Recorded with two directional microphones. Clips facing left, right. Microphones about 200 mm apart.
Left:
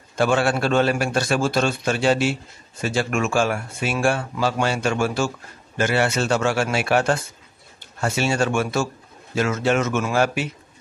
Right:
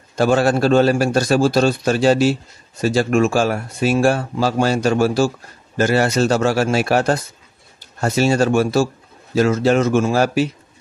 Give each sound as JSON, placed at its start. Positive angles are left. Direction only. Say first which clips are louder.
{"t": 0.1, "sound": "speech", "louder": "right 4 dB", "side_deg": -40}